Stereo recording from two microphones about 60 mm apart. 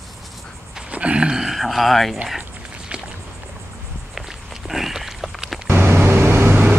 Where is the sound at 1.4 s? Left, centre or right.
Centre.